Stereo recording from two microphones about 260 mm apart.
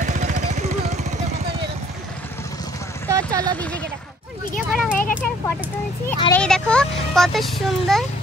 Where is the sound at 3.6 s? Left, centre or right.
Centre.